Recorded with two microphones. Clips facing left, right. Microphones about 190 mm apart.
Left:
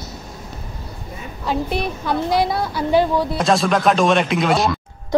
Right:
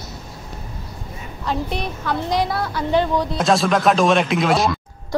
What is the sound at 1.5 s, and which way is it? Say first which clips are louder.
A woman's voice: left 3 dB; 10° left (ahead or behind).